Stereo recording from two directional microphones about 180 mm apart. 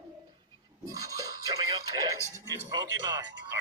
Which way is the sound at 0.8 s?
20° right (ahead or behind).